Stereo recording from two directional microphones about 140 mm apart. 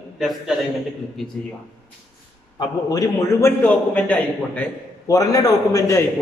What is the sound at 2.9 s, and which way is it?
A man's voice, 20° left (ahead or behind).